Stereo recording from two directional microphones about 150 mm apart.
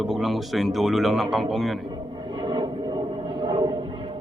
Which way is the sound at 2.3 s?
35° right (ahead or behind).